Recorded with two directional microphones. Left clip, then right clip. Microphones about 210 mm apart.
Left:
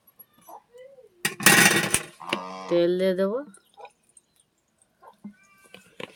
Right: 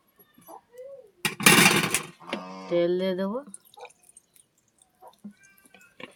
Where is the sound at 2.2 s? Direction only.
20° left (ahead or behind).